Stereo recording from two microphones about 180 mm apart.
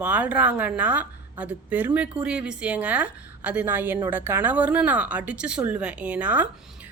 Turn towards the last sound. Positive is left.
turn(degrees=-10)  # may be behind; listen again after turning